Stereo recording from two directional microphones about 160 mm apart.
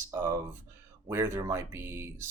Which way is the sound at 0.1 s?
20° right (ahead or behind).